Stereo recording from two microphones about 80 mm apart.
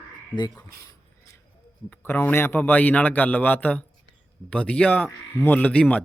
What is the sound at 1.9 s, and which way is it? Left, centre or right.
A man's voice, left.